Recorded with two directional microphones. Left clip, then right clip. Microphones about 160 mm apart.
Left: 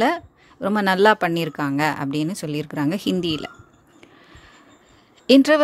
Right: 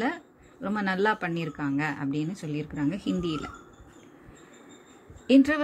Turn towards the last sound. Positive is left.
turn(degrees=45)  # may be behind; listen again after turning